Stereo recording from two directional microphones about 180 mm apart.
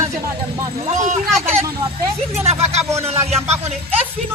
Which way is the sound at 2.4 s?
35° right (ahead or behind).